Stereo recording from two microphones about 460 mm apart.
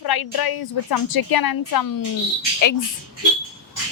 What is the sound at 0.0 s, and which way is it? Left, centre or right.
A woman's voice, left.